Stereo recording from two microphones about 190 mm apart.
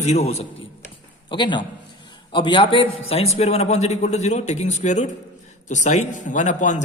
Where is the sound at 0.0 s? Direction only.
35° left (ahead or behind).